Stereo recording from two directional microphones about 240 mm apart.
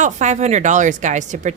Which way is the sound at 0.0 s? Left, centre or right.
Right.